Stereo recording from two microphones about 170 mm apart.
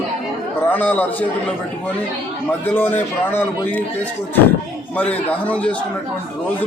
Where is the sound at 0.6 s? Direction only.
10° left (ahead or behind).